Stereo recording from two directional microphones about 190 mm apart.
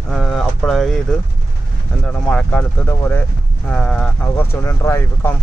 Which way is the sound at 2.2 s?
5° left (ahead or behind).